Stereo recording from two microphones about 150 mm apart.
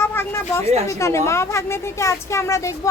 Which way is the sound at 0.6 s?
45° right (ahead or behind).